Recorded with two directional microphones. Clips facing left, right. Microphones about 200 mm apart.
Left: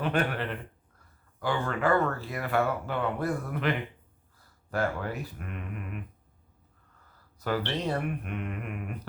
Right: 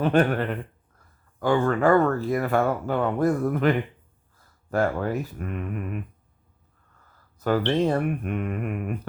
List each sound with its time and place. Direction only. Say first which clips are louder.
0.0 s speech: right 8 dB; 45° right (ahead or behind)
7.3 s speech: right 8 dB; 45° right (ahead or behind)